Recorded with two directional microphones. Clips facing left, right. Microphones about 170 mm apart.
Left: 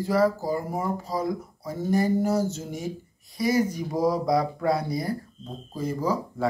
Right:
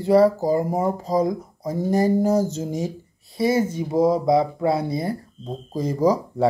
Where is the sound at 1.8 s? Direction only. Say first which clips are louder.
Right 4 dB; 40° right (ahead or behind).